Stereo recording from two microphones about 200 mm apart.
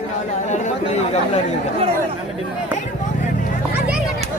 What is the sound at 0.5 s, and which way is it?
Speech, 35° left (ahead or behind).